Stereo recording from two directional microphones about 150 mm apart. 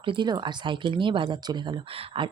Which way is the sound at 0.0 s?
30° right (ahead or behind).